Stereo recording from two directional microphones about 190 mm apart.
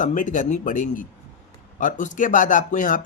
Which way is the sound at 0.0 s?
45° left (ahead or behind).